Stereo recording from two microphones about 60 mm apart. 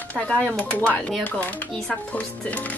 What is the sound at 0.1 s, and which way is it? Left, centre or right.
Speech, left.